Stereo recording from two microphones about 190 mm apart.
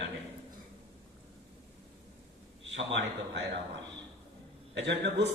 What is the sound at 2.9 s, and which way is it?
Speech, 65° right (ahead or behind).